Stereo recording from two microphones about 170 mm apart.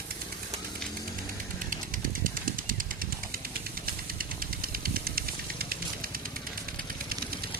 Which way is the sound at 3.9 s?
60° right (ahead or behind).